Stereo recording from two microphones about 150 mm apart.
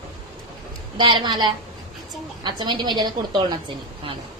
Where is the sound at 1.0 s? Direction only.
30° right (ahead or behind).